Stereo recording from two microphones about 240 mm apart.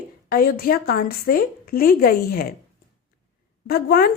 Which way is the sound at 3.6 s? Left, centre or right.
Left.